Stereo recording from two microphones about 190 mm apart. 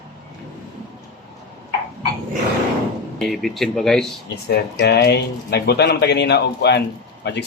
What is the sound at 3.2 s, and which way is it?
Speech, centre (ahead or behind).